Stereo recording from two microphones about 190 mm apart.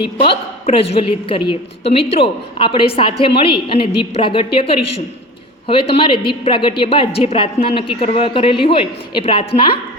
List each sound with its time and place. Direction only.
0.0 s a woman's voice: 30° left (ahead or behind)